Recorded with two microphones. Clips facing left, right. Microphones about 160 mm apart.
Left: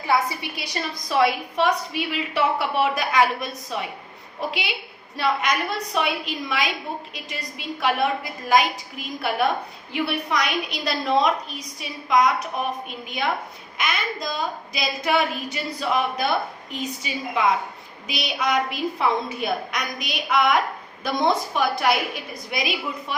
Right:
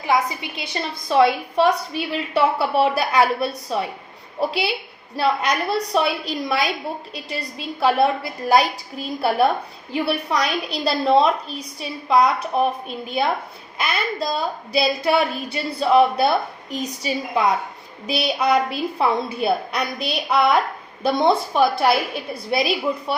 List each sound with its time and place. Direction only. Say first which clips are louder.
0.1 s a woman's voice: right 2 dB; 20° right (ahead or behind)
13.7 s speech: right 3 dB; 35° right (ahead or behind)